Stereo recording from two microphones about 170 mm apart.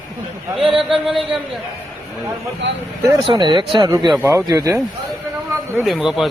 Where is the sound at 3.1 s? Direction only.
25° right (ahead or behind).